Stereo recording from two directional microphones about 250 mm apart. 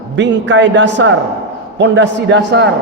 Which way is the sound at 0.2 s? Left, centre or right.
Right.